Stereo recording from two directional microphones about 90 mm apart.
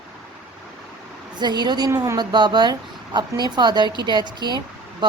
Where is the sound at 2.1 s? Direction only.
55° right (ahead or behind).